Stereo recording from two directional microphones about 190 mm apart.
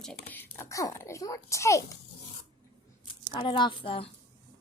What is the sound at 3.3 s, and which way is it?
Speech, 25° left (ahead or behind).